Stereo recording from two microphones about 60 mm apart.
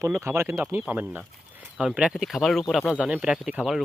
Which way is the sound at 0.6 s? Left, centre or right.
Right.